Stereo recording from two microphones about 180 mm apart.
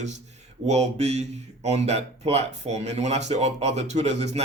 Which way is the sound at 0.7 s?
40° right (ahead or behind).